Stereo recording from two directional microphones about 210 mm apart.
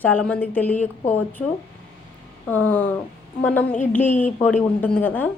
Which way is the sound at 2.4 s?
5° left (ahead or behind).